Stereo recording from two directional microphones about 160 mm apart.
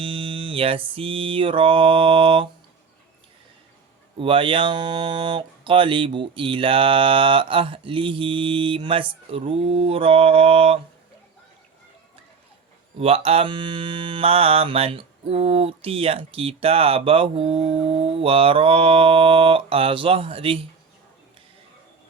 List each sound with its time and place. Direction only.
0.0 s mantra: 35° right (ahead or behind)
4.2 s mantra: 35° right (ahead or behind)
13.0 s mantra: 40° right (ahead or behind)